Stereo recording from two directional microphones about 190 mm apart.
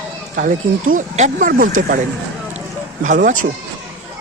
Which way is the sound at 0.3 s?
45° right (ahead or behind).